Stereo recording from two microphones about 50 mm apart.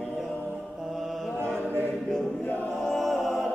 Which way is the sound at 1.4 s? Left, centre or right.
Right.